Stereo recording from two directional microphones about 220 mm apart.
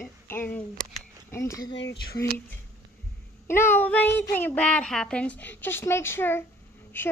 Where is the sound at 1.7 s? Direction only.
50° left (ahead or behind).